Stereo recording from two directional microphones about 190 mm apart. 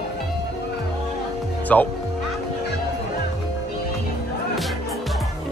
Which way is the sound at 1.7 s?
5° left (ahead or behind).